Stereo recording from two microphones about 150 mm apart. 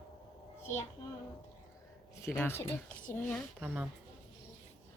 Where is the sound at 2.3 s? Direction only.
15° left (ahead or behind).